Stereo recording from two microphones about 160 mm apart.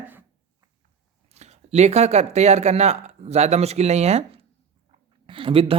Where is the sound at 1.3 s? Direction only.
45° right (ahead or behind).